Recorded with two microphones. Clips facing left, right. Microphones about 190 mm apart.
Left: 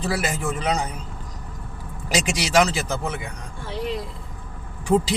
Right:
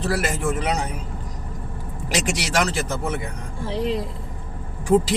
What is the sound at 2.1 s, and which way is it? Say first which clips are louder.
Speech: left 3 dB; centre (ahead or behind).